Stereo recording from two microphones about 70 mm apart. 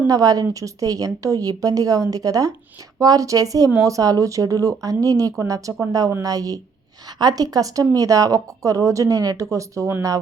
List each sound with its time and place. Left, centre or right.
0.1 s a woman's voice: right